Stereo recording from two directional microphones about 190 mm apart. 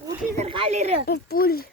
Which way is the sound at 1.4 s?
50° left (ahead or behind).